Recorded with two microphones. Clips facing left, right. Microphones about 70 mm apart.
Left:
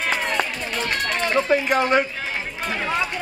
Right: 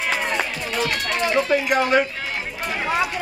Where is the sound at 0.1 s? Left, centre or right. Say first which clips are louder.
Even; centre.